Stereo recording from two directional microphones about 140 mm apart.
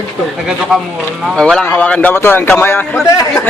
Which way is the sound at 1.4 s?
5° left (ahead or behind).